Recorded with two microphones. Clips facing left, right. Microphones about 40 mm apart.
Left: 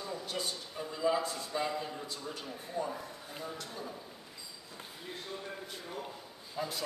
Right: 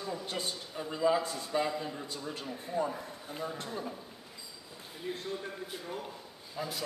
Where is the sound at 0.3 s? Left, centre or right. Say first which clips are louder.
Right 1 dB; centre.